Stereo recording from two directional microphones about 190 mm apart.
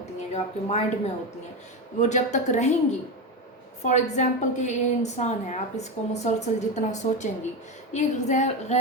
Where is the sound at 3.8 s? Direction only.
40° left (ahead or behind).